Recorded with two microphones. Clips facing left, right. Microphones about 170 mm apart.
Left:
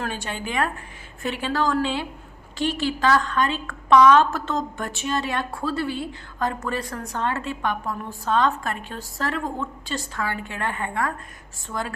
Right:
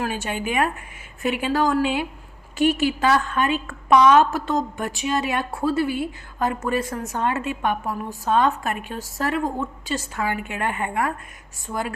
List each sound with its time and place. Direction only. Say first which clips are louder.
0.3 s a woman's voice: right 3 dB; 15° right (ahead or behind)
5.5 s a woman's voice: right 5 dB; 20° right (ahead or behind)
5.7 s a woman's voice: right 4 dB; 5° right (ahead or behind)